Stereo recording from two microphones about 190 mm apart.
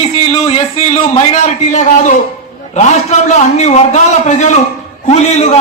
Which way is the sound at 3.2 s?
40° left (ahead or behind).